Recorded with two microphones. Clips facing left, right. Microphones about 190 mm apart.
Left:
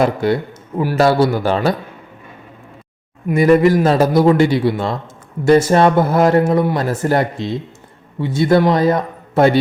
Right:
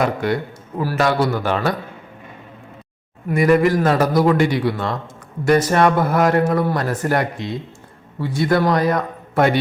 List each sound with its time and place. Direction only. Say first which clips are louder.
0.0 s speech: left 4 dB; 30° left (ahead or behind)
3.3 s speech: left 4 dB; 25° left (ahead or behind)